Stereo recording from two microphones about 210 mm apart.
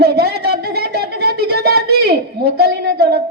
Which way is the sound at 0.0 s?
50° right (ahead or behind).